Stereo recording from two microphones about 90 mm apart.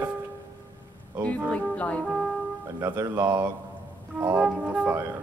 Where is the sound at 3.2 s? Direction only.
45° right (ahead or behind).